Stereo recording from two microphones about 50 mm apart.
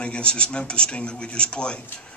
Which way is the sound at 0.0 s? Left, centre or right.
Left.